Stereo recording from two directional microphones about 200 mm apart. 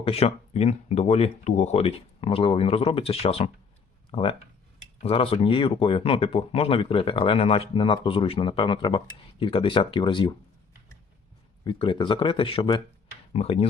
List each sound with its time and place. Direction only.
0.0 s speech: 30° left (ahead or behind)
11.6 s speech: 25° left (ahead or behind)